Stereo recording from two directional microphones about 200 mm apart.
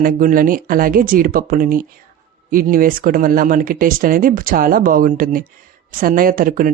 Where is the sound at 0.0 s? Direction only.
45° right (ahead or behind).